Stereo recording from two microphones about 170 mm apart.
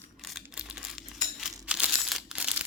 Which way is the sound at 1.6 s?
5° right (ahead or behind).